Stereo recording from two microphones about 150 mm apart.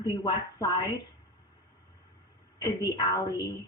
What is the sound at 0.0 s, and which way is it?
Speech, 30° left (ahead or behind).